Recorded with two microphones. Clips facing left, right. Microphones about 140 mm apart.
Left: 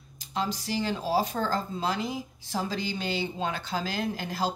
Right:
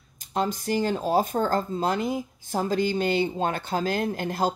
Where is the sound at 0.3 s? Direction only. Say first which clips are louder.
Right 5 dB; 50° right (ahead or behind).